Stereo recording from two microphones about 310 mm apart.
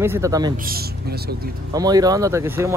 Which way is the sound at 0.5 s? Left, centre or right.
Right.